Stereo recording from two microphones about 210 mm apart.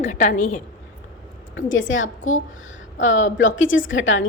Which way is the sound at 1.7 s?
65° left (ahead or behind).